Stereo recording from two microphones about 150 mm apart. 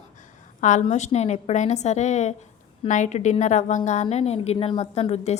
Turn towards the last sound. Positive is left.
turn(degrees=45)  # may be behind; listen again after turning